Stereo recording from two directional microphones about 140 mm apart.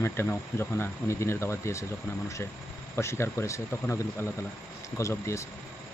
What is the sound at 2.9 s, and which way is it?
Speech, 20° left (ahead or behind).